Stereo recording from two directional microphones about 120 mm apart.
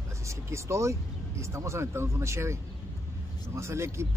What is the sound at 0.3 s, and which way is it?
Speech, 25° right (ahead or behind).